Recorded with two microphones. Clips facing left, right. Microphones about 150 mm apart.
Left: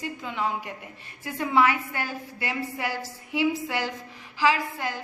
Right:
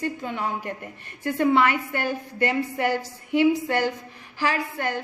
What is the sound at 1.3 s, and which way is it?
A woman's voice, 65° right (ahead or behind).